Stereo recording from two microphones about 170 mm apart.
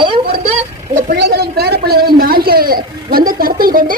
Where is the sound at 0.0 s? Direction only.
30° right (ahead or behind).